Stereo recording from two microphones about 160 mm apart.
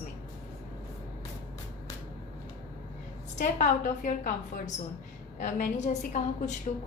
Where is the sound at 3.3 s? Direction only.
50° left (ahead or behind).